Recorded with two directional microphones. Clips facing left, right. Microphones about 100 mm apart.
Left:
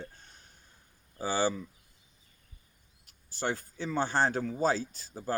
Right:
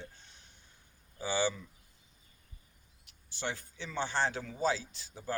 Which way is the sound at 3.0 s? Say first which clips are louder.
Left 5 dB; 40° left (ahead or behind).